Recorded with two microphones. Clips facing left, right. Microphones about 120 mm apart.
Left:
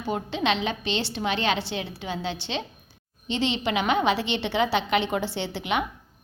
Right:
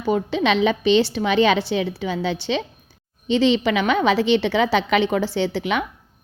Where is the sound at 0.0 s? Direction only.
70° right (ahead or behind).